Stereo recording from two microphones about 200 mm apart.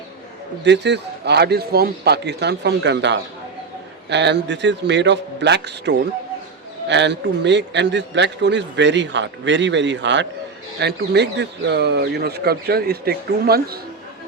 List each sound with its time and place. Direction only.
0.6 s speech: 60° right (ahead or behind)